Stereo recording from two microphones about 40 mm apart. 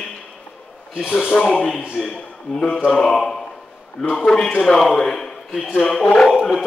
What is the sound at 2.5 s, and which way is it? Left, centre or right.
Speech, left.